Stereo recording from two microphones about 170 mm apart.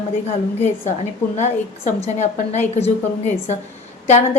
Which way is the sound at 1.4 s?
40° left (ahead or behind).